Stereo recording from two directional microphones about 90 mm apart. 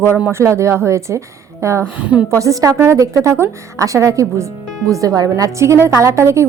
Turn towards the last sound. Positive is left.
turn(degrees=-30)  # may be behind; listen again after turning